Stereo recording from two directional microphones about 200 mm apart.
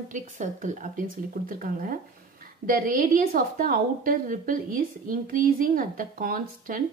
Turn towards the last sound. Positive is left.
turn(degrees=-45)  # may be behind; listen again after turning